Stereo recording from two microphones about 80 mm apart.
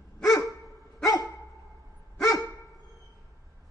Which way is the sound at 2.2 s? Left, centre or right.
Left.